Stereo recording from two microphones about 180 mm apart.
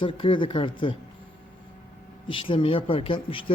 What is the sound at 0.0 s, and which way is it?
Speech, 30° left (ahead or behind).